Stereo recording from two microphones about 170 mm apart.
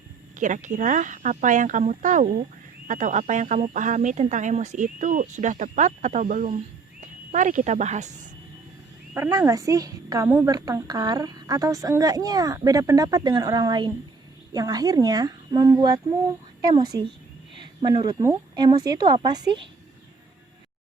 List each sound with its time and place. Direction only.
0.3 s speech: 50° right (ahead or behind)
9.1 s a woman's voice: 15° right (ahead or behind)
10.2 s a woman's voice: 10° right (ahead or behind)
10.5 s a woman's voice: 20° right (ahead or behind)